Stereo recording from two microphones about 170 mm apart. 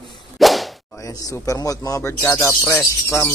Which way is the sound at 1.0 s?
20° left (ahead or behind).